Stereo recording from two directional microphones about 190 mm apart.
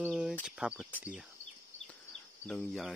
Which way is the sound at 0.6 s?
5° right (ahead or behind).